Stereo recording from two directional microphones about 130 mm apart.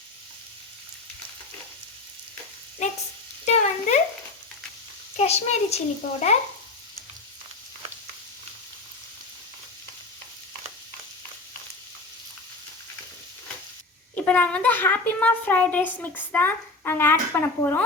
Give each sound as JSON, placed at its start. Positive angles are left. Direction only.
{"t": 3.4, "sound": "stir", "side_deg": 60}
{"t": 5.1, "sound": "a child's voice", "side_deg": 55}
{"t": 14.2, "sound": "a child's voice", "side_deg": 10}